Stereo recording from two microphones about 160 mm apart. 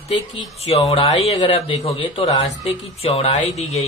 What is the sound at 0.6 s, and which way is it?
Speech, 40° left (ahead or behind).